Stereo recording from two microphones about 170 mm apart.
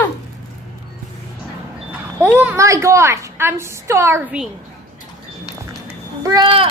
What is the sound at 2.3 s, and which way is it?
A woman's voice, 10° right (ahead or behind).